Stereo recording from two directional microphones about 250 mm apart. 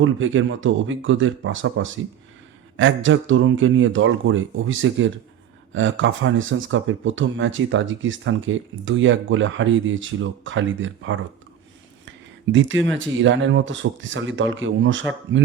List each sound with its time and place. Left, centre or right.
0.0 s speech: right
12.0 s a sound: right
13.0 s speech: right